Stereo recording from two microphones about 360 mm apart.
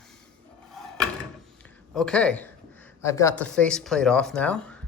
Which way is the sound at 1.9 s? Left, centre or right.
Centre.